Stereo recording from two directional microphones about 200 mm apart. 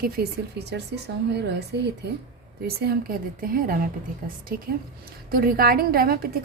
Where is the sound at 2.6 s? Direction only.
50° right (ahead or behind).